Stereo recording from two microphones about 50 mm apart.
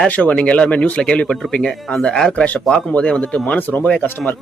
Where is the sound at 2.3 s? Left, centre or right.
Left.